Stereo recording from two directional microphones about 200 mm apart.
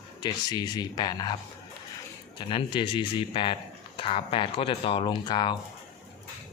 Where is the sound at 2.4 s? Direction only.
25° left (ahead or behind).